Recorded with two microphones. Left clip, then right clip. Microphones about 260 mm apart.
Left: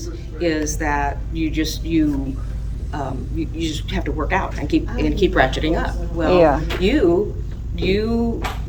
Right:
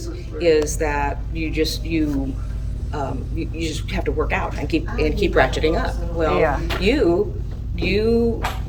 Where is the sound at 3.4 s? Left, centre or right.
Centre.